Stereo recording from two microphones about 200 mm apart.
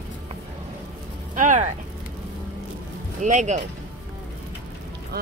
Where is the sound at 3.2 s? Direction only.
35° right (ahead or behind).